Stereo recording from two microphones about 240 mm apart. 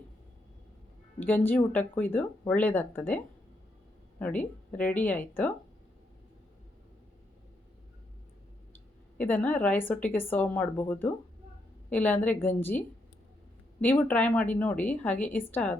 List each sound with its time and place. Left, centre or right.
1.2 s speech: centre
4.2 s speech: centre
9.1 s speech: centre
13.8 s speech: centre